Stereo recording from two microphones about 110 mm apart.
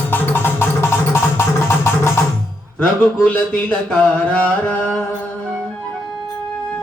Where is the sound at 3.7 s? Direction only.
10° left (ahead or behind).